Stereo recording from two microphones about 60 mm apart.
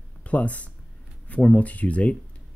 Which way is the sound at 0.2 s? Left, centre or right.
Left.